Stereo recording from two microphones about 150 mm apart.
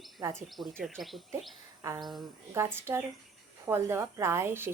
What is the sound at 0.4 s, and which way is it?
Speech, centre (ahead or behind).